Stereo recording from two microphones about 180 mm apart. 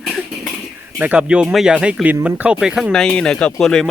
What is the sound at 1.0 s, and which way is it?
Speech, 5° right (ahead or behind).